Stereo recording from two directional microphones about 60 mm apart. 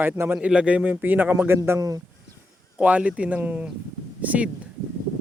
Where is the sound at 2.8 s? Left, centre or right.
Right.